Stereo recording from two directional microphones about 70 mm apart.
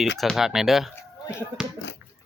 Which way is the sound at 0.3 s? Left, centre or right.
Centre.